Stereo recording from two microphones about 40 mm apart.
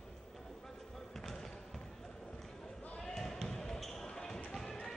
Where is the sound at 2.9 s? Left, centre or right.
Centre.